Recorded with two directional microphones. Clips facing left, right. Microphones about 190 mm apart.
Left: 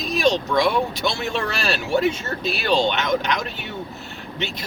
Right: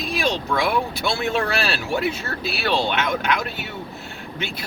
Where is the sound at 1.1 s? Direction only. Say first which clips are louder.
Right 3 dB; 5° right (ahead or behind).